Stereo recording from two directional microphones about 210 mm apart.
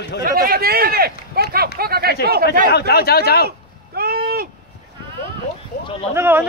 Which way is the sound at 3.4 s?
50° right (ahead or behind).